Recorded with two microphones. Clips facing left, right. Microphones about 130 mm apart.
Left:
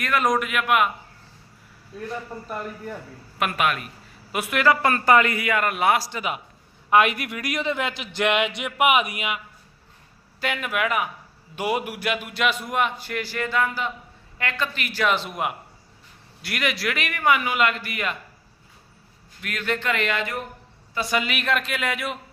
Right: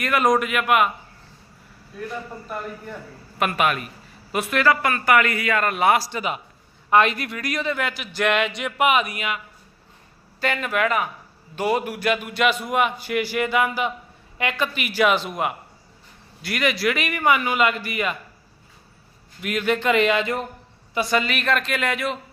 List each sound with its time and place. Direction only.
0.0 s a man's voice: 5° right (ahead or behind)
3.3 s a man's voice: centre (ahead or behind)
4.3 s a man's voice: 10° left (ahead or behind)
4.8 s a man's voice: 30° left (ahead or behind); by 9.4 s 15° left (ahead or behind)
10.4 s a man's voice: 5° left (ahead or behind)
19.4 s speech: 15° right (ahead or behind)
21.1 s a man's voice: 10° left (ahead or behind)